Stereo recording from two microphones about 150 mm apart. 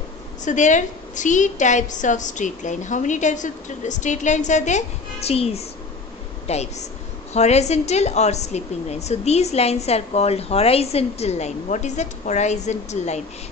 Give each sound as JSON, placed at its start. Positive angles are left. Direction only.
{"t": 0.5, "sound": "a woman's voice", "side_deg": 55}